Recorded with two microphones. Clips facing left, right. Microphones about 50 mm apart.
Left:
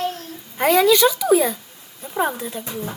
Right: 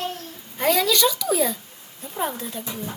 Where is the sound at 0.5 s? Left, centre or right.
Left.